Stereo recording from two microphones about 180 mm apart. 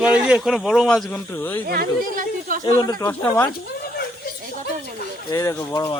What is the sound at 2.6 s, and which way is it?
Speech, 20° left (ahead or behind).